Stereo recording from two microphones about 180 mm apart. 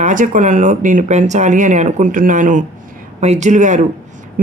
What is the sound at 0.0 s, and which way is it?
Speech, 45° right (ahead or behind).